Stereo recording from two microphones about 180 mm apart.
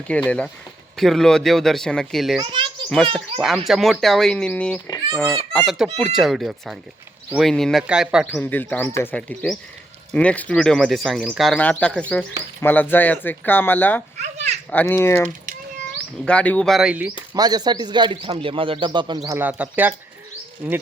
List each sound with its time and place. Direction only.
0.1 s speech: 5° left (ahead or behind)
2.4 s a child's voice: 25° right (ahead or behind)
2.9 s speech: 5° left (ahead or behind)
14.2 s children playing: 40° right (ahead or behind)
14.7 s speech: 10° left (ahead or behind); by 17.1 s 5° right (ahead or behind)
17.3 s a man's voice: 20° right (ahead or behind)
19.4 s speech: 10° right (ahead or behind)